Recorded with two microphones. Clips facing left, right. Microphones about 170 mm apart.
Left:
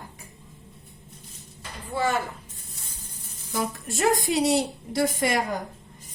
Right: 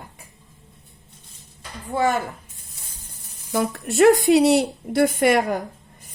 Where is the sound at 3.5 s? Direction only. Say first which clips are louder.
Right 6 dB; 65° right (ahead or behind).